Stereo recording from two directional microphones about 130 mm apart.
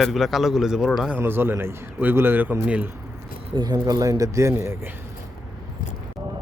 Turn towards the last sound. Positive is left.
turn(degrees=-20)  # may be behind; listen again after turning